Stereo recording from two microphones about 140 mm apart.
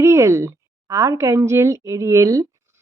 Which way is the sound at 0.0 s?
20° right (ahead or behind).